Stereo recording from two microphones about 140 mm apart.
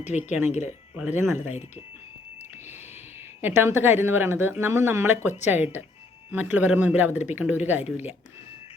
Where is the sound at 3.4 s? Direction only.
15° right (ahead or behind).